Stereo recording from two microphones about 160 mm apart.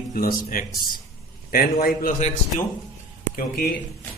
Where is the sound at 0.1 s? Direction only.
65° left (ahead or behind).